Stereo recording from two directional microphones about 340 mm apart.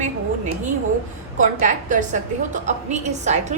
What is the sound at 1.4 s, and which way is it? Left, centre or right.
A woman's voice, right.